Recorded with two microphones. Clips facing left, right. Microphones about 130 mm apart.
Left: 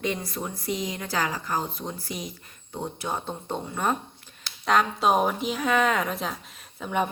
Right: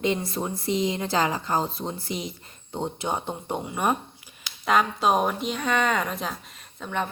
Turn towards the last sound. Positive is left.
turn(degrees=5)  # may be behind; listen again after turning